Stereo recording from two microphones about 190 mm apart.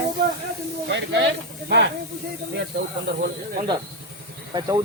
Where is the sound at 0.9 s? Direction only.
70° right (ahead or behind).